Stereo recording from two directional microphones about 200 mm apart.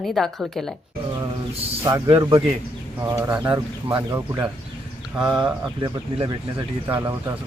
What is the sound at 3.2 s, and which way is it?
Speech, 10° right (ahead or behind).